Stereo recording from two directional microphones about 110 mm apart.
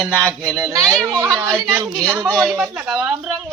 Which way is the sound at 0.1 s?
25° right (ahead or behind).